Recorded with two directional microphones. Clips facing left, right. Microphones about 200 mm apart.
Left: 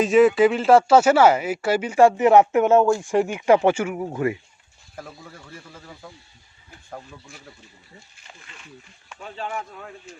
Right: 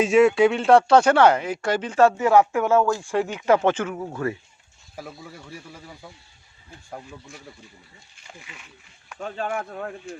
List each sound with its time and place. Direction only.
0.0 s speech: centre (ahead or behind); by 4.4 s 15° left (ahead or behind)
4.9 s speech: 10° right (ahead or behind)
9.2 s speech: 50° right (ahead or behind)